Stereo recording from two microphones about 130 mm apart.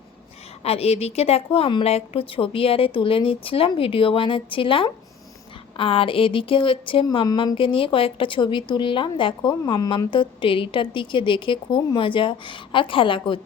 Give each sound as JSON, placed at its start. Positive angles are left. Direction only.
{"t": 0.6, "sound": "a woman's voice", "side_deg": 50}